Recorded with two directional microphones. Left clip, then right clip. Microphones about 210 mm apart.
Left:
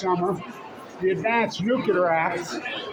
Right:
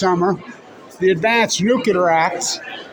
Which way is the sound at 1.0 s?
60° right (ahead or behind).